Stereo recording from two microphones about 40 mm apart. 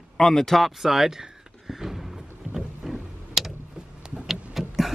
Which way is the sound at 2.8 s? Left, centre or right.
Centre.